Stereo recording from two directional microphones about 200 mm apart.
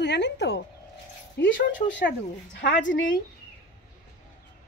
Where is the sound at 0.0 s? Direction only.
60° left (ahead or behind).